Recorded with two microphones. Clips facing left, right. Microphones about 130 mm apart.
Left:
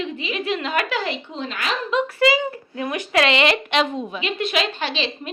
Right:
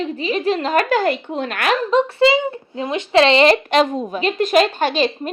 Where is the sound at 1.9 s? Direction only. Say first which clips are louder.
Right 3 dB; 30° right (ahead or behind).